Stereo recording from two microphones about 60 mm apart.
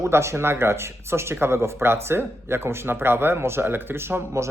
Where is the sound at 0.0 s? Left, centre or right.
Right.